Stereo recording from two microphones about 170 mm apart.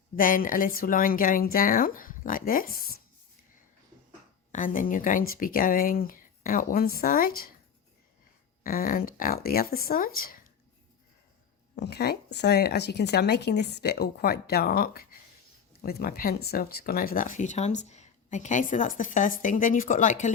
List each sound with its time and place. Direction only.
0.2 s speech: 55° left (ahead or behind)
4.5 s speech: 50° left (ahead or behind)
8.6 s speech: 55° left (ahead or behind)
11.7 s speech: 70° left (ahead or behind); by 20.3 s 45° left (ahead or behind)